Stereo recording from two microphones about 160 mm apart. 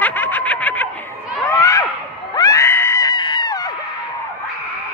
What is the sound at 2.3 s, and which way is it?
Screaming, 20° left (ahead or behind).